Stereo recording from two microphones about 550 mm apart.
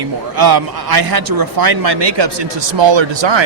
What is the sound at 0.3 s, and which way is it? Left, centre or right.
A man's voice, right.